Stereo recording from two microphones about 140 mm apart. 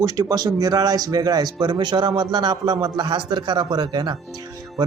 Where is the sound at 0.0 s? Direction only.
25° right (ahead or behind).